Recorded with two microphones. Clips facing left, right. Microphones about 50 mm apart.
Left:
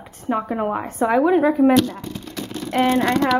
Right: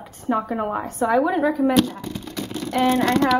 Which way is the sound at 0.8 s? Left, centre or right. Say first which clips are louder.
Left 1 dB; left.